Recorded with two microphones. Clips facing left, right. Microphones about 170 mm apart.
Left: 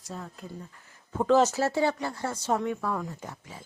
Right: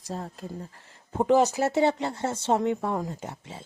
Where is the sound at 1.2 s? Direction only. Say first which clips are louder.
Right 1 dB; 15° right (ahead or behind).